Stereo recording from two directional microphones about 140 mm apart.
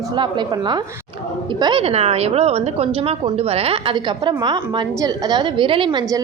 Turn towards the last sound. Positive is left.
turn(degrees=-35)  # may be behind; listen again after turning